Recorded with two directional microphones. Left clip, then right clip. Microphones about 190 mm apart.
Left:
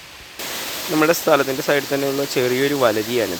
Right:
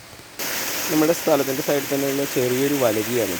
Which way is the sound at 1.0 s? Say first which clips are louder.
Left 3 dB; 10° left (ahead or behind).